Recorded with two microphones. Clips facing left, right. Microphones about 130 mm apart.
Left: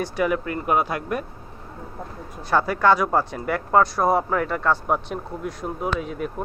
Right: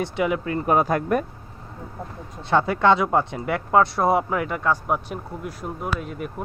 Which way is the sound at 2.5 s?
25° right (ahead or behind).